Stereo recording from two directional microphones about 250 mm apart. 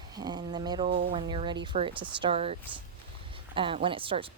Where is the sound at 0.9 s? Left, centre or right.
Right.